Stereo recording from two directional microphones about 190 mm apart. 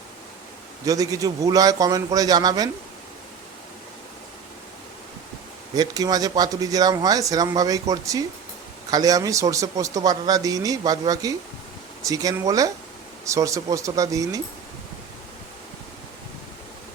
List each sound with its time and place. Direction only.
0.9 s speech: 20° right (ahead or behind)
5.7 s speech: 20° right (ahead or behind)